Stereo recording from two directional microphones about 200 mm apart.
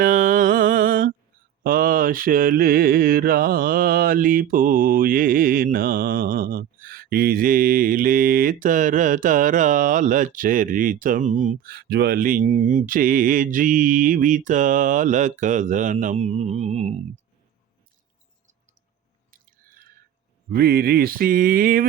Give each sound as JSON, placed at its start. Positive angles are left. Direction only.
{"t": 0.0, "sound": "music", "side_deg": -40}
{"t": 1.6, "sound": "mantra", "side_deg": -45}
{"t": 20.5, "sound": "mantra", "side_deg": -50}